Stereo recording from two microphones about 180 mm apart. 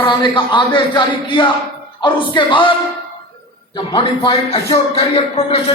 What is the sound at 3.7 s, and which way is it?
A man's voice, 25° left (ahead or behind).